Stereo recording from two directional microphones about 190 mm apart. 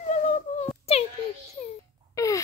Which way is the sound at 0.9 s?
30° left (ahead or behind).